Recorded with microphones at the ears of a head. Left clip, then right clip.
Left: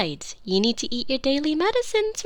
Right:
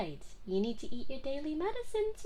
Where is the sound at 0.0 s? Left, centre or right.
Left.